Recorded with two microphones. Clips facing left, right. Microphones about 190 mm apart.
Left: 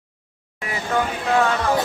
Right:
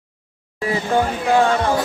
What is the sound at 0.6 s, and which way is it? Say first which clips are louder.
Speech: right 5 dB; 30° right (ahead or behind).